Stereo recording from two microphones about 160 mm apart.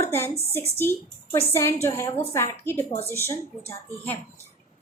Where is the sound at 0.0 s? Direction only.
15° left (ahead or behind).